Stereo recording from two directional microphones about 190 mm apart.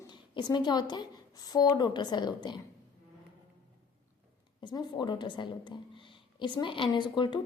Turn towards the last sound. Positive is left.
turn(degrees=25)  # may be behind; listen again after turning